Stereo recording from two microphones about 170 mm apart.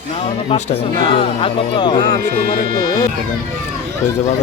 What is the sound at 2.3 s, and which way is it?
Speech, 60° right (ahead or behind).